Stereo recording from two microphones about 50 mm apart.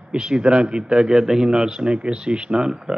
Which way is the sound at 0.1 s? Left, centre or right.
Centre.